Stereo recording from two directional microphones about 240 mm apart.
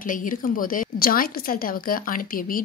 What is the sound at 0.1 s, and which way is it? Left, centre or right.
A woman's voice, left.